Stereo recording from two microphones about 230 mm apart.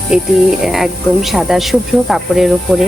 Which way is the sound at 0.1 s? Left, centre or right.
Centre.